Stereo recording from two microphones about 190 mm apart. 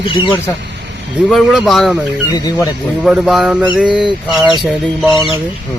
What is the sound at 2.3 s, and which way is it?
Speech, 20° left (ahead or behind).